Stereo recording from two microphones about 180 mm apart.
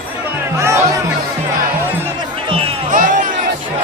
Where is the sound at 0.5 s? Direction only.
15° right (ahead or behind).